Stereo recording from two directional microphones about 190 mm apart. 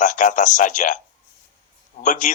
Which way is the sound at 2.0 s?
40° left (ahead or behind).